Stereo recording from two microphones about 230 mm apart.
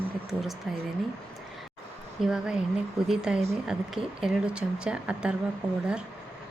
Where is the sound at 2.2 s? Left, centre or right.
Centre.